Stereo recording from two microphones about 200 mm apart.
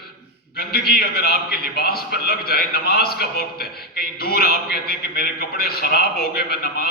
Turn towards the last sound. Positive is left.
turn(degrees=50)  # may be behind; listen again after turning